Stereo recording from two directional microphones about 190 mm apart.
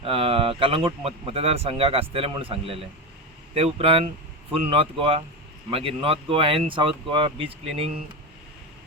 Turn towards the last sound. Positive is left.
turn(degrees=-30)  # may be behind; listen again after turning